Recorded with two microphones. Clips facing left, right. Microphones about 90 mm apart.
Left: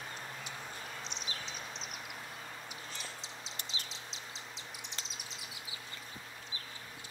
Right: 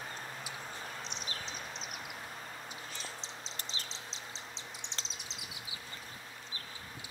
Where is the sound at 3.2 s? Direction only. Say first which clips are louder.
Right 1 dB; 35° right (ahead or behind).